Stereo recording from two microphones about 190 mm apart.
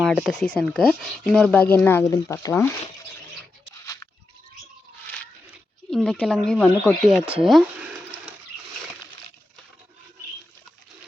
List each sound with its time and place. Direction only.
0.0 s speech: centre (ahead or behind)
5.9 s speech: 5° left (ahead or behind)